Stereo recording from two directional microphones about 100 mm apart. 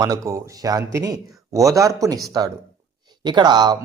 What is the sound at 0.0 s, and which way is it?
Speech, 35° right (ahead or behind).